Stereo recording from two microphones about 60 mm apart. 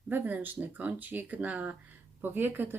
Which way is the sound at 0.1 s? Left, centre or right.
Right.